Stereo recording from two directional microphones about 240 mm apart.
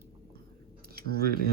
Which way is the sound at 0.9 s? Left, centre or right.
Right.